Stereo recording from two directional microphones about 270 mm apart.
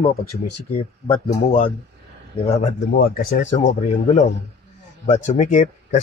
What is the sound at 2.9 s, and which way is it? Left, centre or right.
Speech, left.